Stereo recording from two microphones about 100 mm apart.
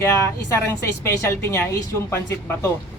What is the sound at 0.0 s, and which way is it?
A woman's voice, 25° left (ahead or behind).